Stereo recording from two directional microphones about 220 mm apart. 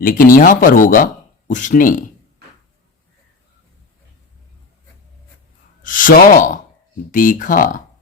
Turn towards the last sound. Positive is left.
turn(degrees=40)  # may be behind; listen again after turning